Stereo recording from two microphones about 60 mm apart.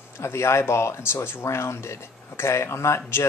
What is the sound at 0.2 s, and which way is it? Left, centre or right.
Speech, left.